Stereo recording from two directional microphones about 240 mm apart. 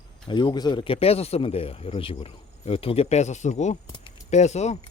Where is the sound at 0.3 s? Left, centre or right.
Centre.